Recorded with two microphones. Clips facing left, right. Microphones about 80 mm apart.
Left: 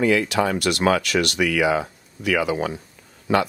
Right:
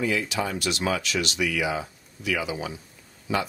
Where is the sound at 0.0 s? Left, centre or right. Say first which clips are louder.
Left 7 dB; left.